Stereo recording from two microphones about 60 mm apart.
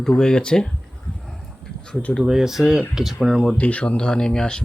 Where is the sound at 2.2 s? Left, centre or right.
Centre.